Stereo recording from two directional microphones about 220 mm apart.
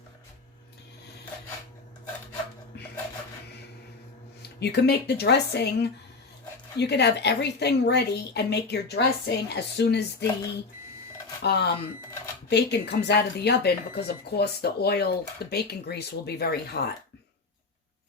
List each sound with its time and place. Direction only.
2.7 s dishes: 50° left (ahead or behind)
4.4 s speech: 50° left (ahead or behind)
11.4 s speech: 50° left (ahead or behind)